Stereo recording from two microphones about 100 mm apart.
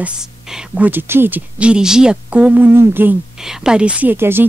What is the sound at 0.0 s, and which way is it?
Speech, 10° right (ahead or behind).